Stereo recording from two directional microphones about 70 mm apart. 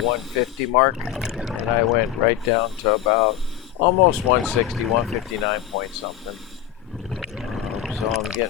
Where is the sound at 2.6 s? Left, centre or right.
Centre.